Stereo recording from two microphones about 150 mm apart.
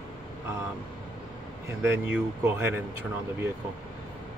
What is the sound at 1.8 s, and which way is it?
Speech, 15° right (ahead or behind).